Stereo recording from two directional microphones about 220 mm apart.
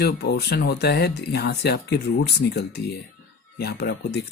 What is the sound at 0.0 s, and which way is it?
Speech, 45° left (ahead or behind).